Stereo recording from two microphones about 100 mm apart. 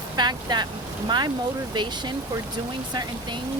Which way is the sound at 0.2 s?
45° right (ahead or behind).